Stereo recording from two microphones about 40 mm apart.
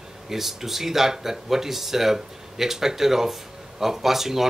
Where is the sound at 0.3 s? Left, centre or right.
Centre.